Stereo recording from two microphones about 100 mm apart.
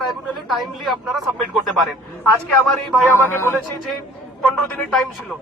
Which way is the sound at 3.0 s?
25° left (ahead or behind).